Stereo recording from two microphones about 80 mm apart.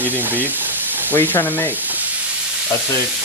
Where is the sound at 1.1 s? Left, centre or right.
Left.